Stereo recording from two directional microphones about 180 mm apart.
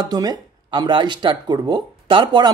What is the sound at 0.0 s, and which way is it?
A man's voice, 20° right (ahead or behind).